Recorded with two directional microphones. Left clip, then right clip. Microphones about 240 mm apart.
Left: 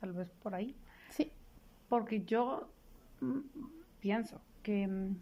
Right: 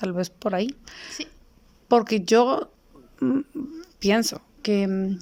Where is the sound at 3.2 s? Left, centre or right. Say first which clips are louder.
Right 15 dB; right.